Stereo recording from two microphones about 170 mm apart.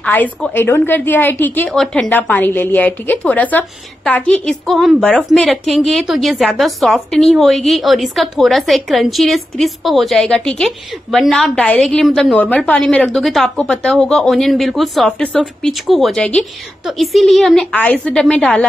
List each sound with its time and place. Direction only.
0.0 s a woman's voice: 10° left (ahead or behind)